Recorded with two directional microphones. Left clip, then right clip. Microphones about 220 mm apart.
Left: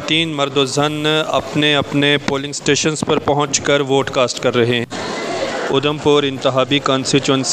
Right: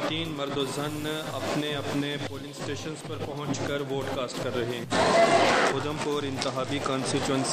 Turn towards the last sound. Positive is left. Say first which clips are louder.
# left 12 dB
turn(degrees=35)  # may be behind; listen again after turning